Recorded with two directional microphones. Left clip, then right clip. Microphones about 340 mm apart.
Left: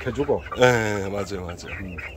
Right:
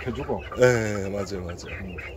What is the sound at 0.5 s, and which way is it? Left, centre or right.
Speech, centre.